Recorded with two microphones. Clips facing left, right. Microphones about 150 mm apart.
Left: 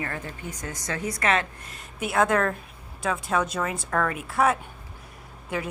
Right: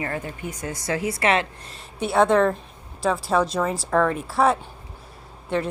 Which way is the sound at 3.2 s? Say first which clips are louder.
Right 4 dB; 30° right (ahead or behind).